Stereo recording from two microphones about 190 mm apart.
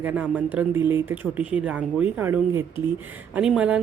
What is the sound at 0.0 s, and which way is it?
A woman's voice, 5° right (ahead or behind).